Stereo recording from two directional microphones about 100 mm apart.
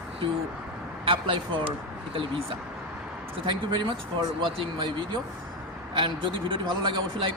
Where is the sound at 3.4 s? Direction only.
55° right (ahead or behind).